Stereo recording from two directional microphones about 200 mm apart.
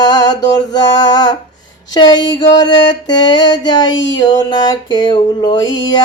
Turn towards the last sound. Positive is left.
turn(degrees=20)  # may be behind; listen again after turning